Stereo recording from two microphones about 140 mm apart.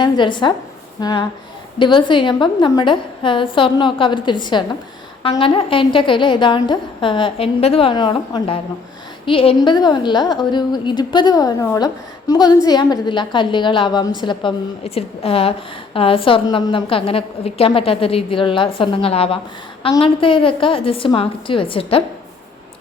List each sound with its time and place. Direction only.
0.0 s a woman's voice: 35° left (ahead or behind)